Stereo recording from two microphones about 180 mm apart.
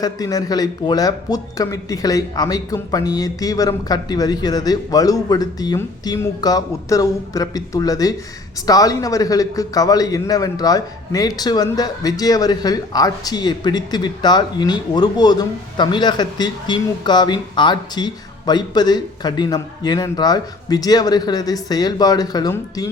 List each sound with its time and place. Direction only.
0.0 s a man's voice: 20° left (ahead or behind)